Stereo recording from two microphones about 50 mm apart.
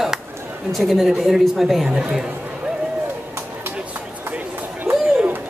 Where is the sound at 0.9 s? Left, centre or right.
Centre.